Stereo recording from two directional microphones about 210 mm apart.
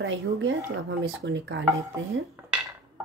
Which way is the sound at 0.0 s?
60° right (ahead or behind).